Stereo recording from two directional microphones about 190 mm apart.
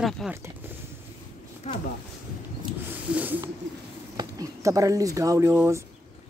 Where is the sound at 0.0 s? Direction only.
Centre (ahead or behind).